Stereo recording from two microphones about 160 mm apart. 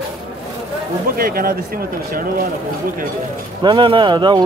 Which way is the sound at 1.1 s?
65° right (ahead or behind).